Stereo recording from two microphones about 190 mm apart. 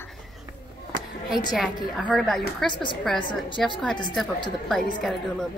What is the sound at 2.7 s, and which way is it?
Speech, 25° left (ahead or behind).